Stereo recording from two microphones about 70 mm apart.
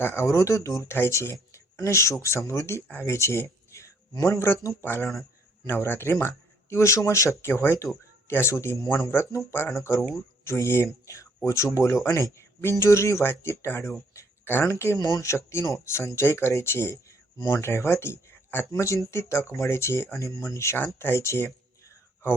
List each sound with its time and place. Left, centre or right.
0.0 s speech: left
9.5 s speech: left
11.0 s a sound: left
11.4 s speech: left
14.1 s a sound: left
14.5 s speech: left
18.7 s speech: left